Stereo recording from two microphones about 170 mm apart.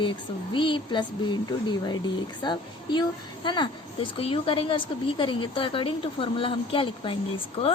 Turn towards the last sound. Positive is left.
turn(degrees=35)  # may be behind; listen again after turning